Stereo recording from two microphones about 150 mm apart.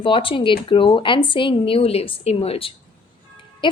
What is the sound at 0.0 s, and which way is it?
A woman's voice, 35° left (ahead or behind).